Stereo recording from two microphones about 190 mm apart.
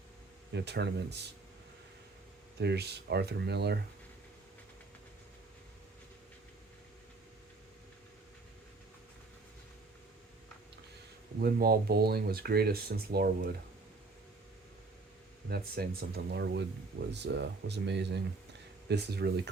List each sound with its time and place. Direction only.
0.5 s speech: 60° right (ahead or behind)
2.6 s speech: 60° right (ahead or behind)
11.3 s speech: 50° right (ahead or behind)
15.4 s speech: 55° right (ahead or behind)